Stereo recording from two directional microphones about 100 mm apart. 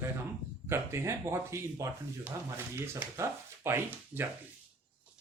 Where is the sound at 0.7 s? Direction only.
25° right (ahead or behind).